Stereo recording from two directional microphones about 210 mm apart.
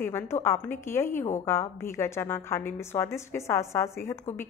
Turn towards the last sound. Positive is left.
turn(degrees=15)  # may be behind; listen again after turning